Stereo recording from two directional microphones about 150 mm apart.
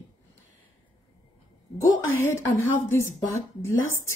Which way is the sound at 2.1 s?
15° left (ahead or behind).